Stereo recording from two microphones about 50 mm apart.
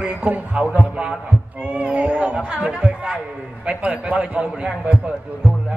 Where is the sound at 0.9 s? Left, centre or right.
Centre.